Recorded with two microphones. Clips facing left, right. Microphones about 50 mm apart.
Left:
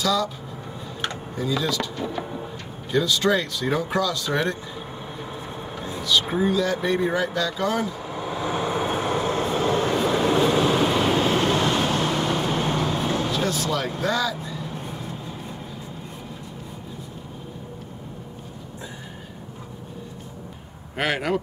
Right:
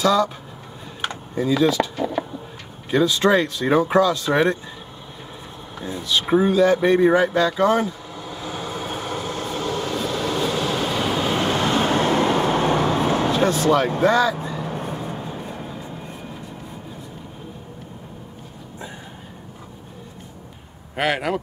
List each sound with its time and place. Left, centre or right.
0.0 s a man's voice: right
1.6 s speech: right
6.0 s a man's voice: right
8.1 s vehicle: left; by 11.3 s centre
11.3 s vehicle: centre; by 15.2 s right
20.9 s speech: centre